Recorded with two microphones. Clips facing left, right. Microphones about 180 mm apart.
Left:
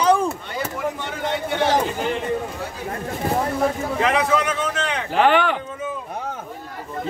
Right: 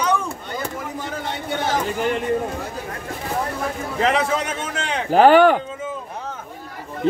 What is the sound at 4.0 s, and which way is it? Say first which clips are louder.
A man's voice: even; 30° right (ahead or behind).